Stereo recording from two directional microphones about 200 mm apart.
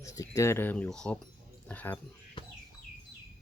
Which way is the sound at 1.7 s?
10° left (ahead or behind).